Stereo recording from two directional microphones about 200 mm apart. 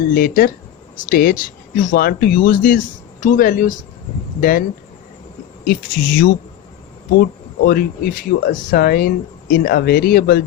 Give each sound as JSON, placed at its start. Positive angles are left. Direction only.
{"t": 0.1, "sound": "speech", "side_deg": 45}
{"t": 5.6, "sound": "speech", "side_deg": 45}
{"t": 7.6, "sound": "speech", "side_deg": 50}